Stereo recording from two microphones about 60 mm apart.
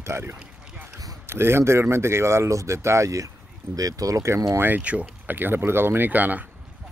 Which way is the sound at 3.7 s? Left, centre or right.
Right.